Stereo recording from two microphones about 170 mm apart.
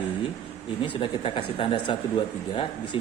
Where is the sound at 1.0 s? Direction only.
30° left (ahead or behind).